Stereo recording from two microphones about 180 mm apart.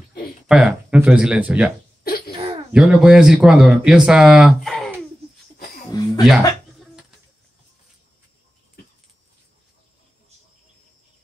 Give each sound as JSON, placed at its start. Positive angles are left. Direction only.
{"t": 0.5, "sound": "speech", "side_deg": -5}
{"t": 2.0, "sound": "throat clearing", "side_deg": 60}
{"t": 2.7, "sound": "speech", "side_deg": -5}
{"t": 5.9, "sound": "a sound", "side_deg": 20}